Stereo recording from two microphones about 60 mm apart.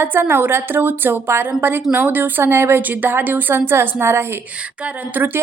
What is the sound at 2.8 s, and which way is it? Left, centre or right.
A woman's voice, right.